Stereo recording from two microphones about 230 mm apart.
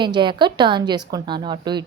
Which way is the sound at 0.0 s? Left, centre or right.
Centre.